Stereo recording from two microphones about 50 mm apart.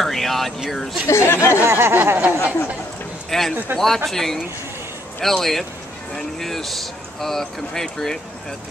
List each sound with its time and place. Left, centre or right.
0.0 s vehicle: centre
1.0 s speech: left
1.7 s a sound: right
3.3 s a man's voice: centre